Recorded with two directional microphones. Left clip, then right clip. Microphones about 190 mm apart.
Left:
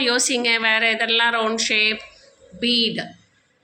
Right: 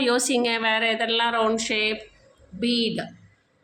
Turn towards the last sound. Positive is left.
turn(degrees=0)  # may be behind; listen again after turning